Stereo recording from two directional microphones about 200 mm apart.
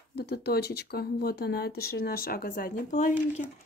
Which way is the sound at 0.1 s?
55° left (ahead or behind).